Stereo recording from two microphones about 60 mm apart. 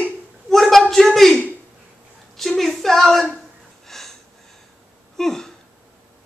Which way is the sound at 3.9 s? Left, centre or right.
Centre.